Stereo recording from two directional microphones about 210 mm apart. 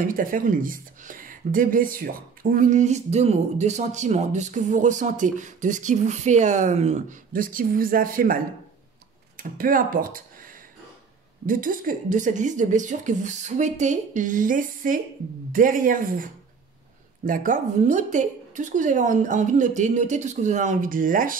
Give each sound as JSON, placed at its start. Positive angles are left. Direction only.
{"t": 0.0, "sound": "speech", "side_deg": -40}
{"t": 9.4, "sound": "speech", "side_deg": -40}
{"t": 11.4, "sound": "speech", "side_deg": -40}